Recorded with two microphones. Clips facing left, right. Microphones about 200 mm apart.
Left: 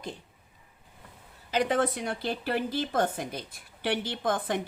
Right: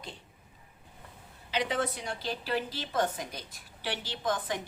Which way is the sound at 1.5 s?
50° left (ahead or behind).